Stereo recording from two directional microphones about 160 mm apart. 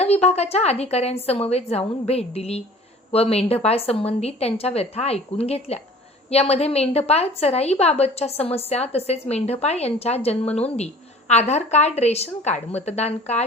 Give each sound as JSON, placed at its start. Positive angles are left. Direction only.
{"t": 0.0, "sound": "a woman's voice", "side_deg": 40}